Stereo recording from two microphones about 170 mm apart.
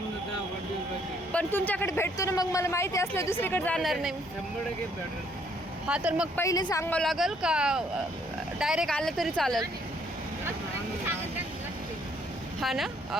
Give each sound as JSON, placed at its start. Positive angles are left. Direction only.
{"t": 1.3, "sound": "speech", "side_deg": 10}
{"t": 5.9, "sound": "speech", "side_deg": -5}
{"t": 6.3, "sound": "speech", "side_deg": 20}
{"t": 6.8, "sound": "speech", "side_deg": 5}
{"t": 12.5, "sound": "speech", "side_deg": 0}